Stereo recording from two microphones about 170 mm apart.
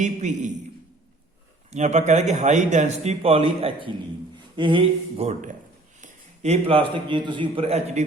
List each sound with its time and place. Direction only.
0.0 s speech: 45° right (ahead or behind)
1.7 s a man's voice: 45° right (ahead or behind)